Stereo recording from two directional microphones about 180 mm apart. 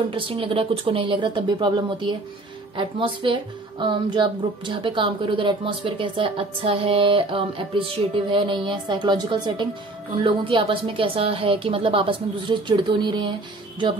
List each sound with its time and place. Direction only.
0.1 s a woman's voice: 30° right (ahead or behind)